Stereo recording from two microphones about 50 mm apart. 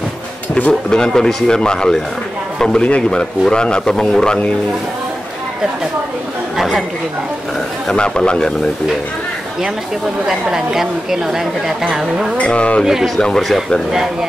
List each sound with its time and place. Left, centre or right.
0.8 s a man's voice: centre
7.9 s a man's voice: centre
10.2 s a woman's voice: centre
12.4 s a man's voice: left
13.2 s a man's voice: centre